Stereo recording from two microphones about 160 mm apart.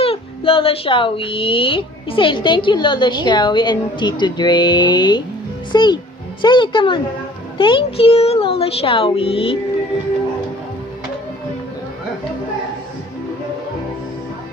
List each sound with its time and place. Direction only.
0.0 s speech: 35° left (ahead or behind)